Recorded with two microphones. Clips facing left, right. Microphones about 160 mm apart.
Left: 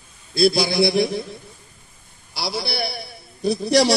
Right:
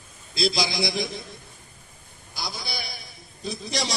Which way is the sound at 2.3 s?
75° left (ahead or behind).